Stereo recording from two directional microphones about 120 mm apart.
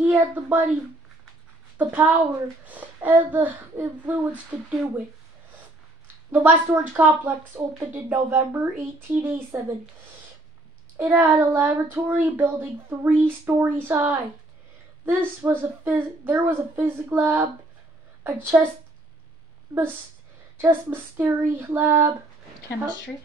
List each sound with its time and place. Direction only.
0.0 s a child's voice: 10° right (ahead or behind)
1.8 s a child's voice: 15° right (ahead or behind)
6.3 s a child's voice: 15° right (ahead or behind)
11.0 s a child's voice: 20° right (ahead or behind)
20.5 s a child's voice: 20° right (ahead or behind)